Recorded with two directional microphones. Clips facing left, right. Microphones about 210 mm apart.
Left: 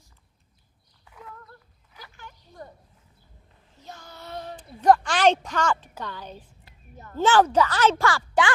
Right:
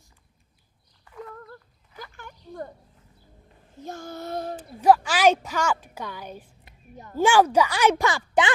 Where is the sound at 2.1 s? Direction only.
50° right (ahead or behind).